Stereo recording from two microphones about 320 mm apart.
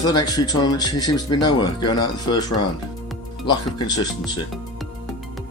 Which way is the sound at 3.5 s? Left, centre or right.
Centre.